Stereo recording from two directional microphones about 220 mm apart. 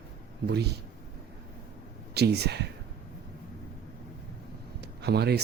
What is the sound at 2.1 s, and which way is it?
Speech, 50° right (ahead or behind).